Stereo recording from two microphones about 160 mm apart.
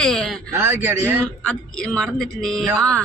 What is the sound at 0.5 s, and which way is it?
Speech, 15° right (ahead or behind).